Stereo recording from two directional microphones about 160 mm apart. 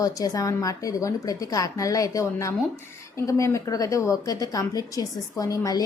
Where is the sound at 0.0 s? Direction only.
20° left (ahead or behind).